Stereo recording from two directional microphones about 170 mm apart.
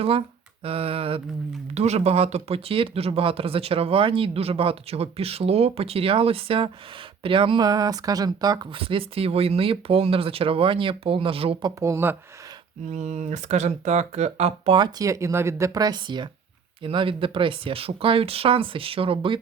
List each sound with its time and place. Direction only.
0.0 s speech: 35° right (ahead or behind)
11.8 s speech: 15° right (ahead or behind)
12.9 s speech: 45° right (ahead or behind)